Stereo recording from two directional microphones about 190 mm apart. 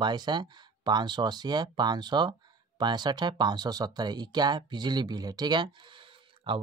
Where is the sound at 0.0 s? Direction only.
25° right (ahead or behind).